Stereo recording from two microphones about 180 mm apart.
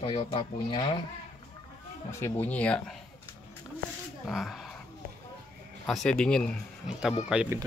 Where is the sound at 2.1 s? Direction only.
15° left (ahead or behind).